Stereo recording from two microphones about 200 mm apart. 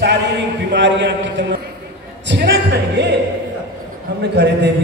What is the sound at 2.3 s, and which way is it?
Speech, 60° right (ahead or behind).